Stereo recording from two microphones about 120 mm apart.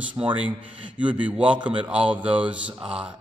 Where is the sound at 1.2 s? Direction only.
10° right (ahead or behind).